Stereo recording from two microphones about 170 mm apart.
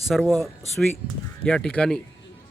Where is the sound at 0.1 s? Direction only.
Centre (ahead or behind).